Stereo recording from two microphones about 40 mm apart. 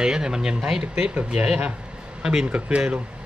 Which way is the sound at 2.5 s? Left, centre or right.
Centre.